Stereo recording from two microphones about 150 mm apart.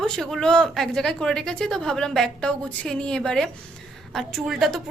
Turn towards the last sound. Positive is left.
turn(degrees=0)  # may be behind; listen again after turning